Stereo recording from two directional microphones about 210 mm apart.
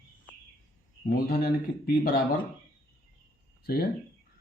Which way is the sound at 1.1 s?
45° left (ahead or behind).